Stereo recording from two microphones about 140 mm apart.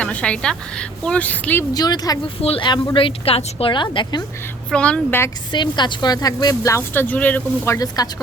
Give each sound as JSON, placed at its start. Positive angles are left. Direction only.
{"t": 0.0, "sound": "speech", "side_deg": 10}
{"t": 1.7, "sound": "a woman's voice", "side_deg": 30}
{"t": 2.4, "sound": "speech", "side_deg": 40}
{"t": 4.7, "sound": "speech", "side_deg": 10}
{"t": 5.5, "sound": "a woman's voice", "side_deg": 30}